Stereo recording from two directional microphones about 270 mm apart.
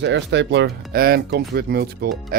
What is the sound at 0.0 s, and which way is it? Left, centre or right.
Speech, right.